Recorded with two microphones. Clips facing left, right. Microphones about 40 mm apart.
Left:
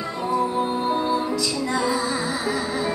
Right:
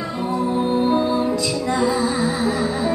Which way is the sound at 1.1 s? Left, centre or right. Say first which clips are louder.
Right 3 dB; right.